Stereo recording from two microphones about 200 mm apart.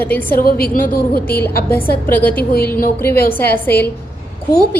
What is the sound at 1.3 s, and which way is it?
A woman's voice, 10° left (ahead or behind).